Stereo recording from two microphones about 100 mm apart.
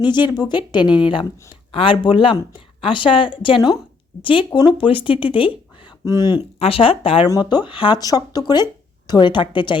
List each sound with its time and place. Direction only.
0.0 s speech: 45° left (ahead or behind)
0.9 s speech: 10° right (ahead or behind)
1.7 s speech: 60° left (ahead or behind)
6.1 s speech: 40° left (ahead or behind)
6.6 s speech: 70° left (ahead or behind)
7.3 s speech: 45° left (ahead or behind)
7.9 s speech: 40° left (ahead or behind)